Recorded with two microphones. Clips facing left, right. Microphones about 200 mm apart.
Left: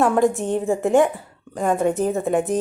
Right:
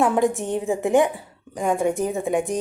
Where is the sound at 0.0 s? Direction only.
15° right (ahead or behind).